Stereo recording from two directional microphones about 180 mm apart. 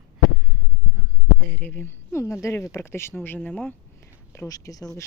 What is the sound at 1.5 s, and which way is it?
Speech, 10° left (ahead or behind).